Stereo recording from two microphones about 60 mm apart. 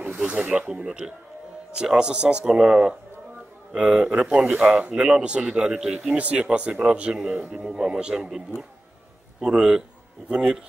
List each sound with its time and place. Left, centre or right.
0.2 s speech: centre
6.1 s speech: right